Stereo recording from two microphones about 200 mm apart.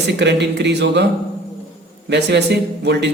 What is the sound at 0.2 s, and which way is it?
Speech, 60° right (ahead or behind).